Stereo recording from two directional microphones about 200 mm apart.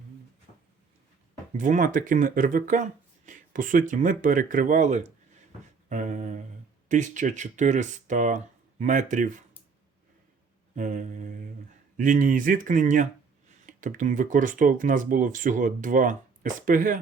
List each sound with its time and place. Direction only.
1.5 s speech: 40° right (ahead or behind)
5.9 s a sound: 40° right (ahead or behind)
6.8 s speech: 40° right (ahead or behind)
10.8 s speech: 40° right (ahead or behind)